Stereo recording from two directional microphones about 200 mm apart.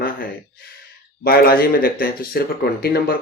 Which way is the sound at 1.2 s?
45° left (ahead or behind).